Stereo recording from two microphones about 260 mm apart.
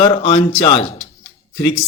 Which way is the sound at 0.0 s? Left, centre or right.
Left.